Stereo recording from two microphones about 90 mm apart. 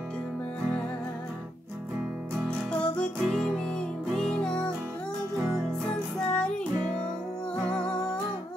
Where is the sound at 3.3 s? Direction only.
5° left (ahead or behind).